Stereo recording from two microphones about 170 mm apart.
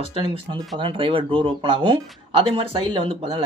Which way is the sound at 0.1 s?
35° right (ahead or behind).